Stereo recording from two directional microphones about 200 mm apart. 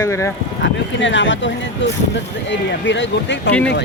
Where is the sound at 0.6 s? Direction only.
70° left (ahead or behind).